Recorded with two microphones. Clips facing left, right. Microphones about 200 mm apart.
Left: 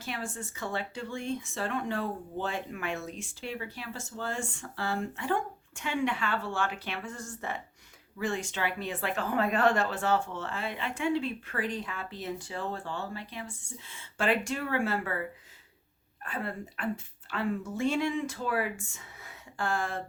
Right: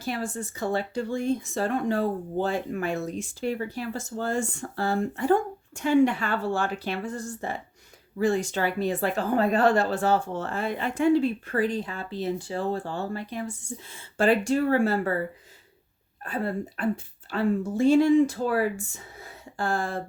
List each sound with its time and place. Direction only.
0.0 s speech: 35° right (ahead or behind)